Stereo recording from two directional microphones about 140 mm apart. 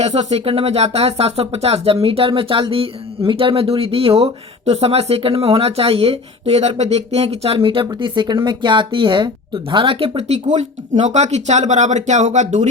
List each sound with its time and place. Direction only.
0.0 s speech: 55° right (ahead or behind)
10.4 s speech: 55° right (ahead or behind)